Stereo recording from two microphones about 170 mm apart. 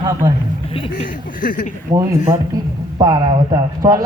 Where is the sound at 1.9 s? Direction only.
25° right (ahead or behind).